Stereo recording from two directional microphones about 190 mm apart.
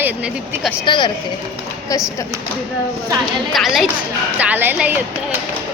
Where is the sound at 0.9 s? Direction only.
25° left (ahead or behind).